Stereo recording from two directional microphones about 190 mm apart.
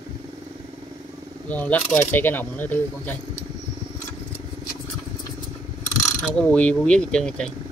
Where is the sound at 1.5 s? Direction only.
10° left (ahead or behind).